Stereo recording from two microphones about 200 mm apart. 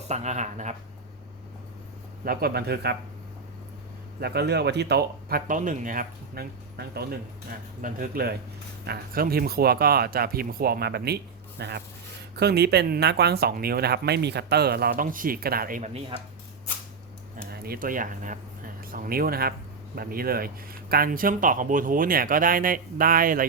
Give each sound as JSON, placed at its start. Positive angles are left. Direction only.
{"t": 0.1, "sound": "speech", "side_deg": -35}
{"t": 2.2, "sound": "speech", "side_deg": -50}
{"t": 4.2, "sound": "speech", "side_deg": -55}
{"t": 15.9, "sound": "speech", "side_deg": -30}
{"t": 17.5, "sound": "speech", "side_deg": -50}